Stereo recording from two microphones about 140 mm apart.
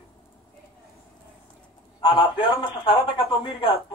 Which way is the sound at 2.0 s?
40° left (ahead or behind).